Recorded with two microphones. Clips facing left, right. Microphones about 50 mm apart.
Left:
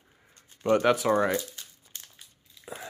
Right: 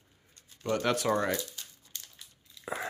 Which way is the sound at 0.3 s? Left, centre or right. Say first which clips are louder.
Left 8 dB; left.